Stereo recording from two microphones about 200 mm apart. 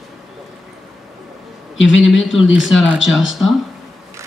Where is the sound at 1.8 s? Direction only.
70° left (ahead or behind).